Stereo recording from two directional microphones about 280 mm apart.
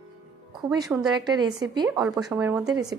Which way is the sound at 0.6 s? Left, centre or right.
Centre.